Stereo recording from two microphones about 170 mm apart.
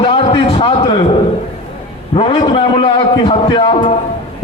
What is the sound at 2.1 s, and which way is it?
A man's voice, 30° left (ahead or behind).